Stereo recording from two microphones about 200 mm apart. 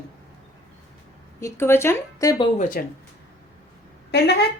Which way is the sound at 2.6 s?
40° left (ahead or behind).